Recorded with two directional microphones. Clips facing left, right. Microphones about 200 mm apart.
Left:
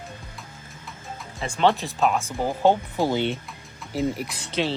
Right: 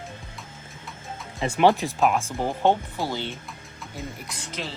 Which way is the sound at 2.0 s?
Centre (ahead or behind).